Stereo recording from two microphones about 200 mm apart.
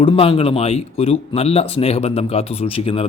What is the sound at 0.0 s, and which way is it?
A man's voice, 25° left (ahead or behind).